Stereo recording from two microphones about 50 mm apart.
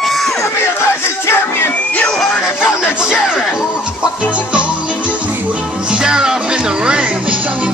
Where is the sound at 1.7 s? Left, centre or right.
Left.